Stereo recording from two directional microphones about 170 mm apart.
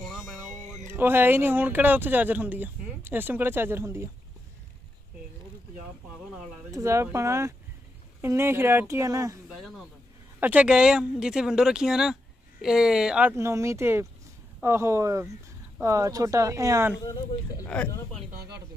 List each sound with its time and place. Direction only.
0.1 s speech: 5° right (ahead or behind)
6.7 s speech: 15° right (ahead or behind)
9.5 s speech: 5° right (ahead or behind); by 16.9 s 20° right (ahead or behind)
17.0 s speech: 20° left (ahead or behind)
17.6 s speech: 5° left (ahead or behind)